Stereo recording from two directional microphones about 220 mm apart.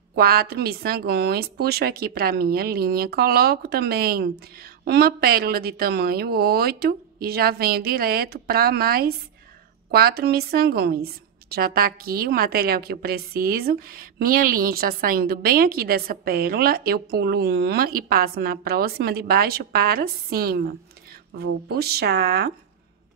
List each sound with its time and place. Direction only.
0.1 s a woman's voice: 45° right (ahead or behind)